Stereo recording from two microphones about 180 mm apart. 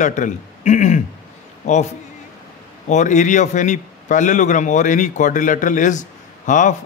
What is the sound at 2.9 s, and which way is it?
A man's voice, 40° left (ahead or behind).